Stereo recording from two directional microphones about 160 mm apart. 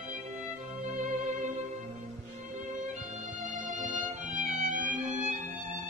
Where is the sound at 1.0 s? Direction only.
50° right (ahead or behind).